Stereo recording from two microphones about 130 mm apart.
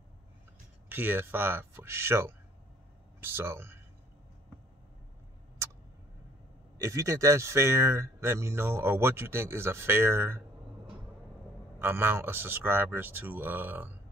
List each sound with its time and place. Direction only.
0.8 s speech: 15° right (ahead or behind)
6.8 s speech: 25° right (ahead or behind)
11.8 s speech: 15° right (ahead or behind)